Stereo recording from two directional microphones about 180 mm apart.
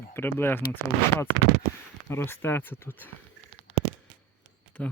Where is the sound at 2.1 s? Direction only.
15° left (ahead or behind).